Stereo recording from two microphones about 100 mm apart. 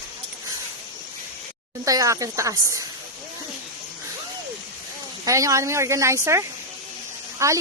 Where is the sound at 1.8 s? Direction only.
35° right (ahead or behind).